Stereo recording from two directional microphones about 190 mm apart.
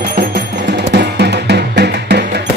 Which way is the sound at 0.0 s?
50° right (ahead or behind).